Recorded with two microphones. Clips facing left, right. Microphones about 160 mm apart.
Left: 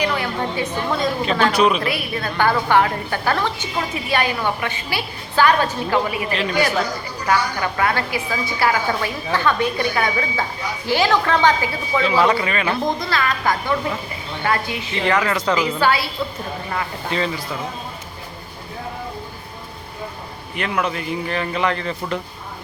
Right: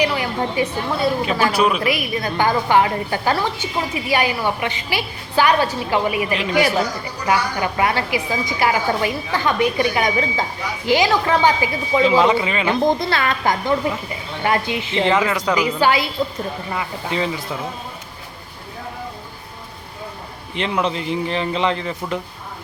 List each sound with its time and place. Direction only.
0.0 s a woman's voice: 10° right (ahead or behind)
15.2 s a woman's voice: 10° right (ahead or behind)
20.6 s a man's voice: 25° right (ahead or behind)